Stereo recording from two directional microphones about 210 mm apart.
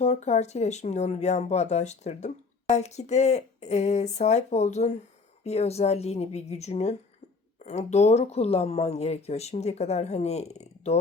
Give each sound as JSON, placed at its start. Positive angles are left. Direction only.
{"t": 0.0, "sound": "speech", "side_deg": 30}